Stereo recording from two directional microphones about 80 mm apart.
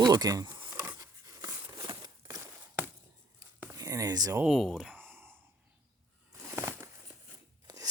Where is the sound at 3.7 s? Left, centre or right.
Right.